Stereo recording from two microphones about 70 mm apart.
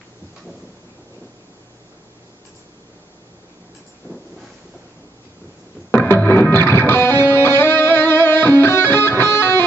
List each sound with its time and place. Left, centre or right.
4.1 s wind noise: right
5.9 s music: left